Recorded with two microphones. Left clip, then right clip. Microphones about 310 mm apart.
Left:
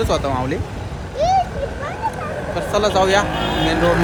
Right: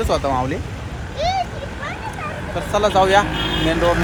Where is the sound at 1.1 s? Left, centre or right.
Left.